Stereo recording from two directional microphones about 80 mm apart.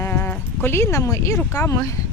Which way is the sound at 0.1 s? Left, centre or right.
Left.